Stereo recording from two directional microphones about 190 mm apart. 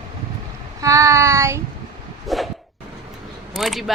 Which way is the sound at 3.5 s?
Centre (ahead or behind).